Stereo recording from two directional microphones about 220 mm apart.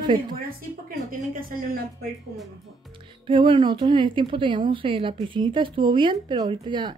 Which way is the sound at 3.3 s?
20° right (ahead or behind).